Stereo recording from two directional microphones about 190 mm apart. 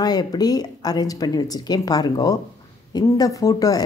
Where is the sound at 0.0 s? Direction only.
20° left (ahead or behind).